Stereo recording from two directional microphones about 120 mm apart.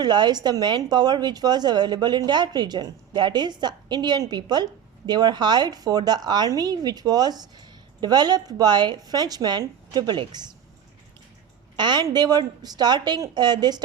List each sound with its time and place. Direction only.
0.0 s a woman's voice: 35° right (ahead or behind)
11.8 s a woman's voice: 35° right (ahead or behind)